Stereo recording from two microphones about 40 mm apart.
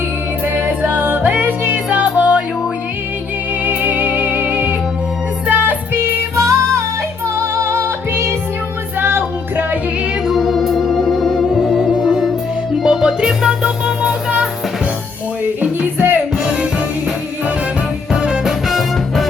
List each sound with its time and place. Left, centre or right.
0.4 s music: right
1.9 s music: right
3.6 s music: right
5.5 s music: right
9.0 s music: right
10.3 s music: centre
12.8 s music: centre
15.8 s music: right
16.4 s music: right
18.7 s music: centre